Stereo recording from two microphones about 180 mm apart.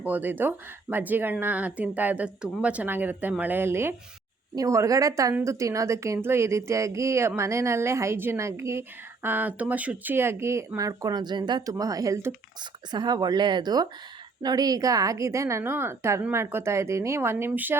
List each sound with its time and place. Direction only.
0.0 s a woman's voice: 10° right (ahead or behind)